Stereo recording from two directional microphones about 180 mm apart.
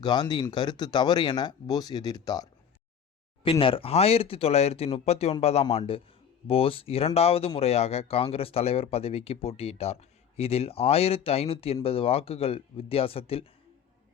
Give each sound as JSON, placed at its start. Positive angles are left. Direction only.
{"t": 0.0, "sound": "speech", "side_deg": 25}